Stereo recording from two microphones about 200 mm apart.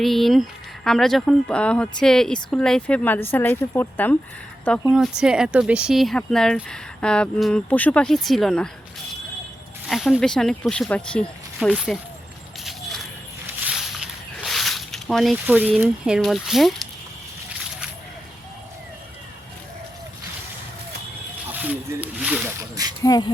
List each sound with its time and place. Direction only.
0.0 s a woman's voice: centre (ahead or behind)
4.8 s speech: 5° right (ahead or behind)
9.8 s speech: centre (ahead or behind)
12.6 s a sound: centre (ahead or behind)
21.5 s snake: 10° right (ahead or behind)
23.0 s a sound: 20° left (ahead or behind)